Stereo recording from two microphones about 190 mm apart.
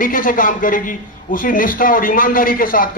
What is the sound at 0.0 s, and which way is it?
A man's voice, 45° left (ahead or behind).